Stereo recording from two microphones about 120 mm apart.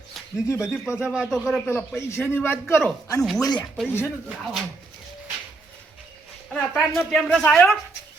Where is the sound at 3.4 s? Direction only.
35° left (ahead or behind).